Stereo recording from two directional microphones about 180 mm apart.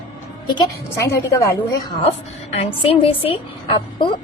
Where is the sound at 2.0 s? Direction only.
35° left (ahead or behind).